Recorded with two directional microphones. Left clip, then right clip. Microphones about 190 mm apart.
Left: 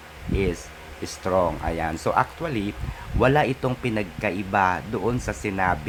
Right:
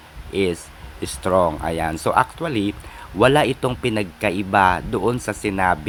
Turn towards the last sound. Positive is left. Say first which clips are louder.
# right 4 dB
turn(degrees=-15)  # may be behind; listen again after turning